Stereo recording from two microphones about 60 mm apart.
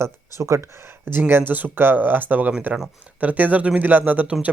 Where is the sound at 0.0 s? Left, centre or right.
Right.